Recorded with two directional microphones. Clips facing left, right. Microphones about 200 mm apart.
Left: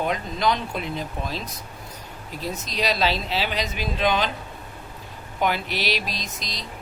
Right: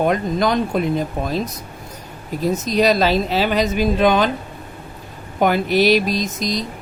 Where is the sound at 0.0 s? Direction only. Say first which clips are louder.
Right 6 dB; 50° right (ahead or behind).